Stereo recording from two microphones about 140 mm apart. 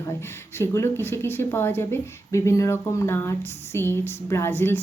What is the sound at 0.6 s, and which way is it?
A woman's voice, 20° left (ahead or behind).